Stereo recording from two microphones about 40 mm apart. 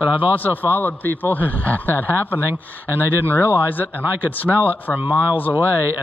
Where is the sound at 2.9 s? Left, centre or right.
Right.